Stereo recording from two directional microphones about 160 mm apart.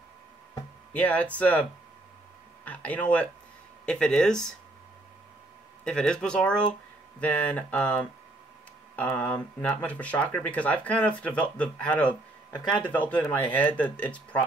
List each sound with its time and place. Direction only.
0.9 s speech: 10° left (ahead or behind)
5.9 s speech: 5° left (ahead or behind)